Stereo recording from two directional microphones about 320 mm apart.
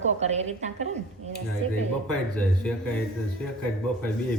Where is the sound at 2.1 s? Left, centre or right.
Centre.